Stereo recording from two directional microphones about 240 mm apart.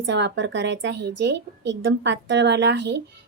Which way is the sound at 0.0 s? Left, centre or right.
Right.